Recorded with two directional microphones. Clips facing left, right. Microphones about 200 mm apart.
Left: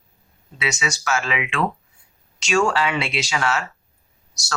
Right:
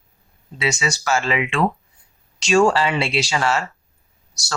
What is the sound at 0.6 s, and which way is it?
Speech, 30° right (ahead or behind).